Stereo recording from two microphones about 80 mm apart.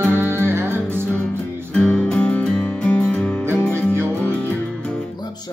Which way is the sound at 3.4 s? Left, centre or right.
Right.